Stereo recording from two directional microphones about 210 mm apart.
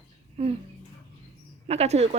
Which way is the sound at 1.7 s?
30° right (ahead or behind).